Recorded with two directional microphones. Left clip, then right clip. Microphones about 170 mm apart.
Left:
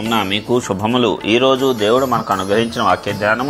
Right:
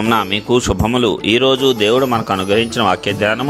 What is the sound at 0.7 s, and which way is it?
Speech, 50° right (ahead or behind).